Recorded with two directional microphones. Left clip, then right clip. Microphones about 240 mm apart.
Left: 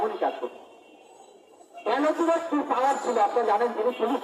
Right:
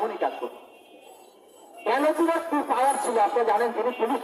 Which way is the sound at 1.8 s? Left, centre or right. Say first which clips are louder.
Right 2 dB; right.